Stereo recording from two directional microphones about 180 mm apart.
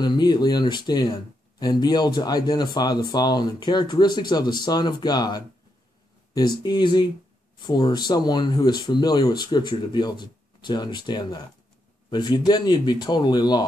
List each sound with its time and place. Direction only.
0.0 s speech: 25° left (ahead or behind)